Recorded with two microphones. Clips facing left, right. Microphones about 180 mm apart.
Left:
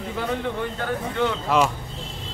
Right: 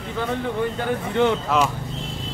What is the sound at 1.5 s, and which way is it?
Speech, centre (ahead or behind).